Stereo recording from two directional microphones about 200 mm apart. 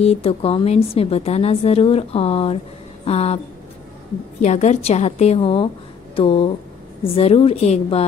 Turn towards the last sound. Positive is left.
turn(degrees=30)  # may be behind; listen again after turning